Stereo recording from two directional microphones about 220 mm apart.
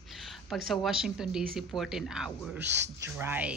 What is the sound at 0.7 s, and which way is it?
A man's voice, centre (ahead or behind).